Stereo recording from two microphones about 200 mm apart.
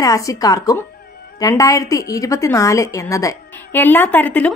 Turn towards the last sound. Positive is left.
turn(degrees=10)  # may be behind; listen again after turning